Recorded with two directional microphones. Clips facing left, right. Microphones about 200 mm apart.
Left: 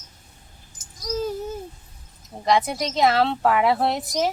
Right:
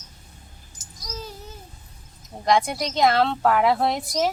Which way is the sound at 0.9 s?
50° left (ahead or behind).